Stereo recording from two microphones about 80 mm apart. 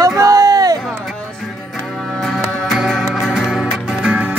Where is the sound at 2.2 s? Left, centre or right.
Centre.